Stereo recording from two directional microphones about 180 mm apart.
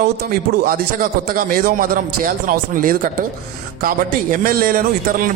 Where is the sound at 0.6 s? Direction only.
55° right (ahead or behind).